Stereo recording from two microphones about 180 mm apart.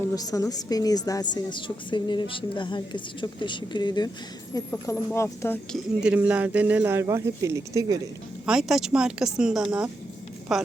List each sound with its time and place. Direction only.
0.1 s a woman's voice: 20° left (ahead or behind)
5.7 s speech: 5° right (ahead or behind)
8.4 s speech: 5° right (ahead or behind)